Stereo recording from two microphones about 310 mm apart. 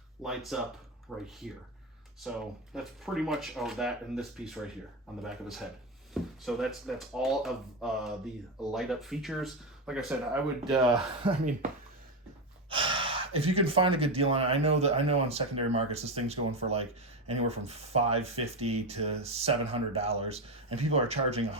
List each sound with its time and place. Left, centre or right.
0.2 s speech: centre
2.7 s speech: centre
11.2 s speech: centre
12.7 s speech: centre